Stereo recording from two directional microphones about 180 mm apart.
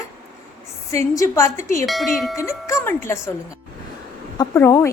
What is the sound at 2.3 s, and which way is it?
Speech, 15° left (ahead or behind).